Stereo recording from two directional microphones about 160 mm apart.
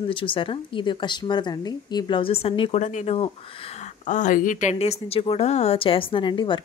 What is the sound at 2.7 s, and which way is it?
Speech, 50° left (ahead or behind).